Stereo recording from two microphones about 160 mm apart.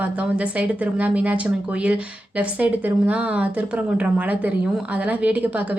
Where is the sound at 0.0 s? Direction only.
10° right (ahead or behind).